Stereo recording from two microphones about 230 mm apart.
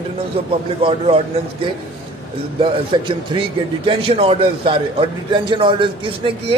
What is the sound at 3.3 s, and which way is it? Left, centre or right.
A man's voice, centre.